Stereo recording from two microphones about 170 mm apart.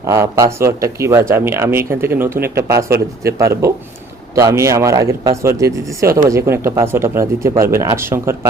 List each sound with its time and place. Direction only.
0.0 s speech: 20° right (ahead or behind)